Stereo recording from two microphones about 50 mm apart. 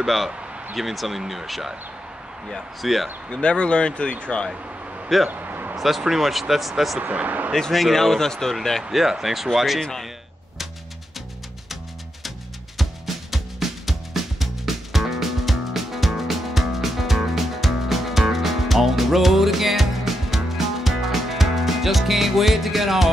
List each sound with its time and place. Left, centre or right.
0.0 s speech: centre
2.8 s speech: centre
3.3 s speech: centre
5.3 s a sound: right
5.8 s speech: centre
7.0 s speech: right
7.7 s speech: centre
8.9 s speech: centre
12.7 s music: centre